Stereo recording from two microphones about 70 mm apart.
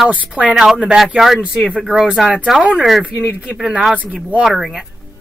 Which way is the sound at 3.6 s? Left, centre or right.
Centre.